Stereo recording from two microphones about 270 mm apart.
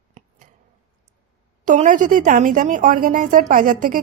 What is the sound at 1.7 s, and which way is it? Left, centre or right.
Speech, right.